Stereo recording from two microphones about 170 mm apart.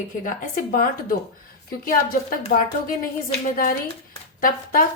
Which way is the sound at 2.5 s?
50° left (ahead or behind).